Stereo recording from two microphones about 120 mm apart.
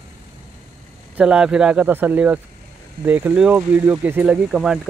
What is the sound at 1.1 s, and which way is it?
Speech, 10° right (ahead or behind).